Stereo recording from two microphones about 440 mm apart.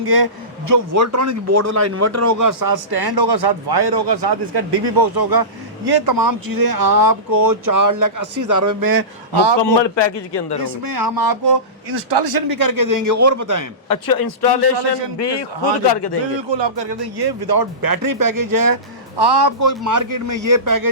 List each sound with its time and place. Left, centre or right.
0.0 s a man's voice: right
0.7 s a man's voice: right
9.6 s a man's voice: left
10.8 s a man's voice: right
13.8 s a man's voice: left
16.5 s a man's voice: right
19.5 s a man's voice: right